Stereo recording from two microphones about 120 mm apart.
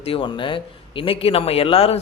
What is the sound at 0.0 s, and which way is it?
Speech, 50° left (ahead or behind).